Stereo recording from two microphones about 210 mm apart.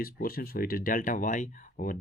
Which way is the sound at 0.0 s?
45° left (ahead or behind).